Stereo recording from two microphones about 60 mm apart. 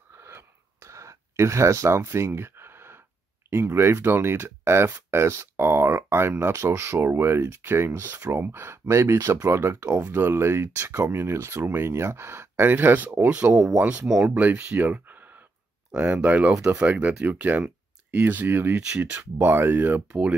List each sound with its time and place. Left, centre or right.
0.2 s a sound: right
3.4 s speech: right
8.8 s speech: right
9.9 s speech: right
10.2 s speech: right
14.0 s speech: centre
14.3 s speech: right
18.8 s speech: centre
19.4 s speech: right
20.1 s speech: centre